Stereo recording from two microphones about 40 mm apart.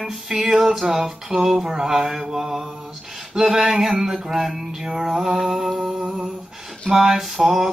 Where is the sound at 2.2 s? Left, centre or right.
Centre.